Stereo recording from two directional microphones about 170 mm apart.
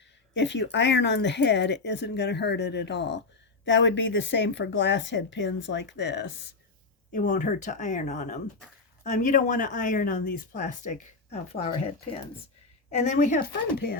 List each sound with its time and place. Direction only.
0.3 s speech: 90° left
7.1 s speech: 50° left (ahead or behind)
12.9 s speech: 45° left (ahead or behind)
13.7 s speech: 60° left (ahead or behind)